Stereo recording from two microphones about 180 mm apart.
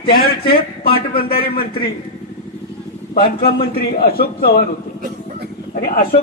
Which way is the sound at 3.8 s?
55° left (ahead or behind).